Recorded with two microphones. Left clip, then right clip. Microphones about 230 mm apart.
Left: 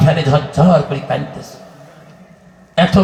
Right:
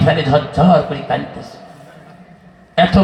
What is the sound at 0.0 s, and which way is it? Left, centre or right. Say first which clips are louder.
A man's voice: right 1 dB; left.